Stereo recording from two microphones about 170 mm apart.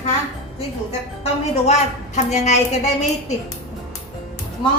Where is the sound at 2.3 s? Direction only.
40° left (ahead or behind).